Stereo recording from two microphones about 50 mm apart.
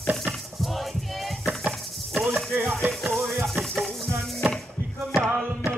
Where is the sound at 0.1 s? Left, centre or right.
Centre.